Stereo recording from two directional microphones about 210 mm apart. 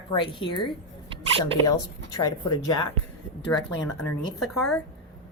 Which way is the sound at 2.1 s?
15° left (ahead or behind).